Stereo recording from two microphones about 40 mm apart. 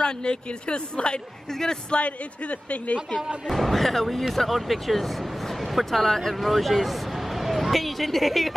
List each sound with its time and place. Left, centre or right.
0.0 s a woman's voice: left
1.5 s a man's voice: centre
1.9 s a woman's voice: left
3.4 s speech: centre